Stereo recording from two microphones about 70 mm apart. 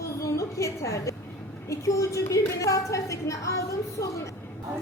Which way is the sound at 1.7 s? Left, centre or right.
Left.